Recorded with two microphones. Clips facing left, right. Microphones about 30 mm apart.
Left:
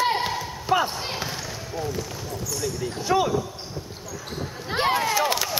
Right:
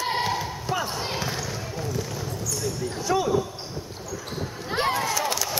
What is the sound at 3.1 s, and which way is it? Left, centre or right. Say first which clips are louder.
Speech: left 2 dB; left.